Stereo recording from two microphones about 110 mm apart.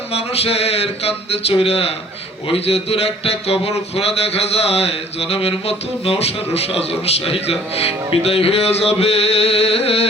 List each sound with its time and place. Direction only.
0.1 s speech: 65° left (ahead or behind)